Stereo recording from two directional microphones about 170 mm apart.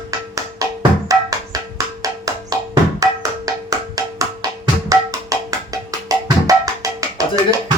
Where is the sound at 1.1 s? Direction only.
20° right (ahead or behind).